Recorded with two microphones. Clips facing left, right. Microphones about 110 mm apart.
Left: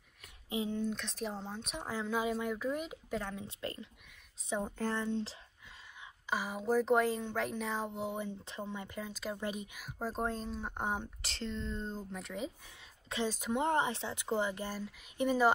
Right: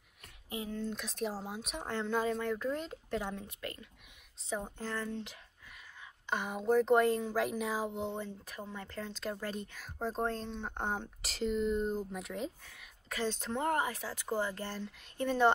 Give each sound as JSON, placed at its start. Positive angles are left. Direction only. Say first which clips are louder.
{"t": 0.5, "sound": "speech", "louder": "left 4 dB", "side_deg": 25}
{"t": 0.9, "sound": "speech", "louder": "right 2 dB", "side_deg": 0}
{"t": 3.4, "sound": "speech", "louder": "left 2 dB", "side_deg": 30}
{"t": 4.9, "sound": "speech", "louder": "left 1 dB", "side_deg": 20}
{"t": 6.2, "sound": "speech", "louder": "right 2 dB", "side_deg": 5}
{"t": 8.1, "sound": "speech", "louder": "left 1 dB", "side_deg": 15}
{"t": 11.2, "sound": "speech", "louder": "right 11 dB", "side_deg": -5}
{"t": 12.6, "sound": "a sound", "louder": "even", "side_deg": 20}
{"t": 13.3, "sound": "speech", "louder": "left 2 dB", "side_deg": 10}
{"t": 13.7, "sound": "speech", "louder": "right 2 dB", "side_deg": 25}